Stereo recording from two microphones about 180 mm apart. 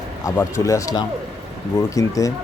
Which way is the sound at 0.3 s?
15° left (ahead or behind).